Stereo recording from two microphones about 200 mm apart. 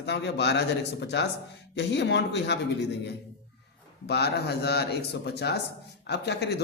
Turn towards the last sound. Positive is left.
turn(degrees=55)  # may be behind; listen again after turning